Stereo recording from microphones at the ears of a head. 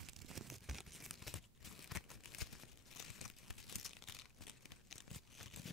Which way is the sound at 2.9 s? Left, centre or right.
Left.